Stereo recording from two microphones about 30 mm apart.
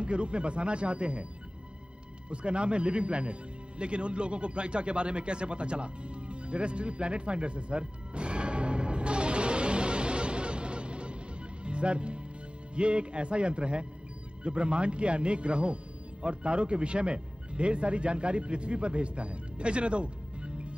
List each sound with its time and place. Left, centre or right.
0.0 s speech: right
2.2 s music: right
11.6 s speech: right